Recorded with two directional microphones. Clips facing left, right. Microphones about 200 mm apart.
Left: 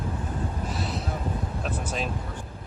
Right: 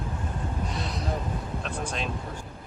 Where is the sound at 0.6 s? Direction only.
5° left (ahead or behind).